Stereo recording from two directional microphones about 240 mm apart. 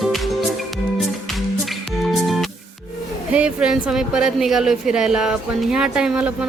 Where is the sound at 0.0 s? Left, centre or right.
Centre.